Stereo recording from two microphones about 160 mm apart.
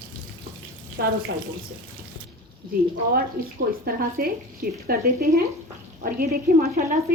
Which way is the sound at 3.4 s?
70° right (ahead or behind).